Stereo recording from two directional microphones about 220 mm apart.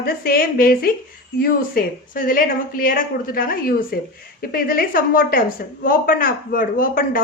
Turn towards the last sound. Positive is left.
turn(degrees=40)  # may be behind; listen again after turning